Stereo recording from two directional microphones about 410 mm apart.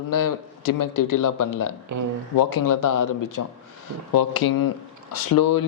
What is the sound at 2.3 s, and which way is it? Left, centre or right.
Speech, left.